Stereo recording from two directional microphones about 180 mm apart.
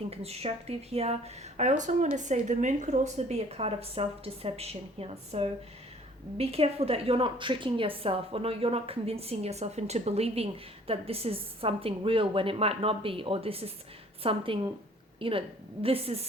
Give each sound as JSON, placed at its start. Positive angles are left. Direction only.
{"t": 0.1, "sound": "a woman's voice", "side_deg": -35}